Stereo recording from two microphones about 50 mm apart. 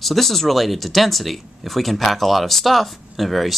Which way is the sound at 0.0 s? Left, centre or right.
Centre.